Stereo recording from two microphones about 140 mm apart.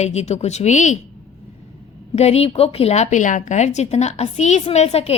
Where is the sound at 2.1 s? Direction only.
50° left (ahead or behind).